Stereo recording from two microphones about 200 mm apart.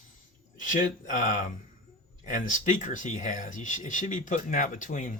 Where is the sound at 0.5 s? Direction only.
40° left (ahead or behind).